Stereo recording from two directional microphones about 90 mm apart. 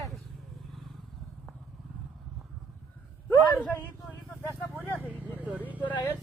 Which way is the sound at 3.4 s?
15° left (ahead or behind).